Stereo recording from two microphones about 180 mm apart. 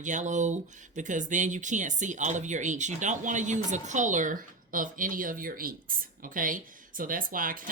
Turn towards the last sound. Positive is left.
turn(degrees=-50)  # may be behind; listen again after turning